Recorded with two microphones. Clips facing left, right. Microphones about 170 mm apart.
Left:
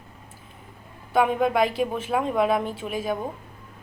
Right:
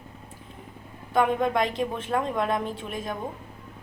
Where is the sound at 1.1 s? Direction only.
5° left (ahead or behind).